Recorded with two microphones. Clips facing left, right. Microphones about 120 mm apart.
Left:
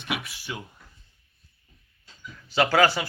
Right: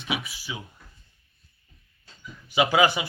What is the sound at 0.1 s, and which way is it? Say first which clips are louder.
Speech: even; centre (ahead or behind).